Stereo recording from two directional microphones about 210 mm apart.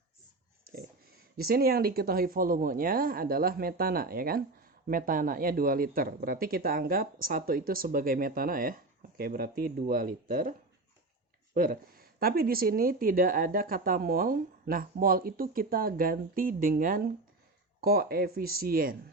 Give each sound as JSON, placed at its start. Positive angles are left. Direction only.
{"t": 0.7, "sound": "speech", "side_deg": -45}
{"t": 11.5, "sound": "speech", "side_deg": -40}